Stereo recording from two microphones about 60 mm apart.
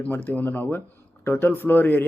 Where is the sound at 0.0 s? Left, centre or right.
Left.